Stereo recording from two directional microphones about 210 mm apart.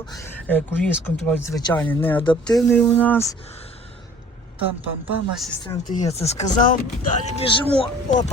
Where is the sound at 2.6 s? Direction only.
10° left (ahead or behind).